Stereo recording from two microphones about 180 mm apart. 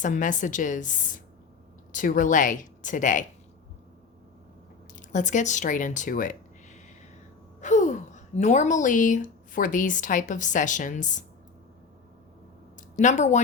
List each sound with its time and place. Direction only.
0.0 s a woman's voice: 45° left (ahead or behind)
4.9 s a woman's voice: 45° left (ahead or behind)
13.0 s speech: 40° left (ahead or behind)